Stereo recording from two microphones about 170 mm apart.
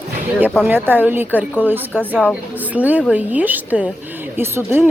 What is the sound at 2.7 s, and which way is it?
A woman's voice, 10° right (ahead or behind).